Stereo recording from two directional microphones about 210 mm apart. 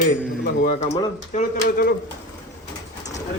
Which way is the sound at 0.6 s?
35° left (ahead or behind).